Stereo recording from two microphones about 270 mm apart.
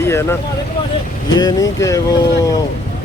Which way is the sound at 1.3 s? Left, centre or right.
Centre.